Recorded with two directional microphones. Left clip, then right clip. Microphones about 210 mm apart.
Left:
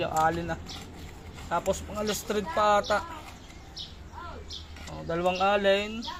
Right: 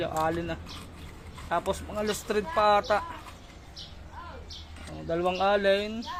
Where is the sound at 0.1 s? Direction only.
10° right (ahead or behind).